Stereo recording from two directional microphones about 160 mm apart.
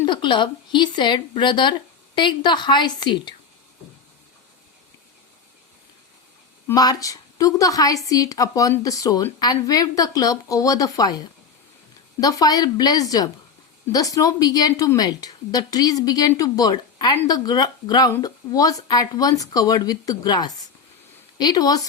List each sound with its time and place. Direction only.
0.0 s a woman's voice: 30° left (ahead or behind)
6.7 s a woman's voice: 20° left (ahead or behind)